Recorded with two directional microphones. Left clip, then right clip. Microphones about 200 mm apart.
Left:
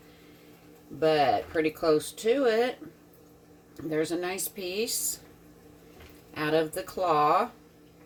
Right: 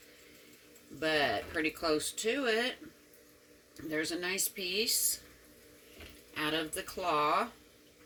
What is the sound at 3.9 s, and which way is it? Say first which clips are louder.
Speech: left 5 dB; 15° right (ahead or behind).